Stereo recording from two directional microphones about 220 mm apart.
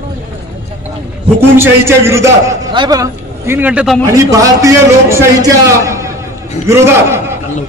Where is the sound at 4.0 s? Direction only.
15° right (ahead or behind).